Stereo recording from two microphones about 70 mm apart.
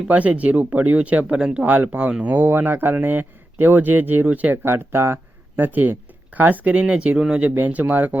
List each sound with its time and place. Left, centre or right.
0.1 s speech: right
1.6 s speech: right
7.5 s speech: right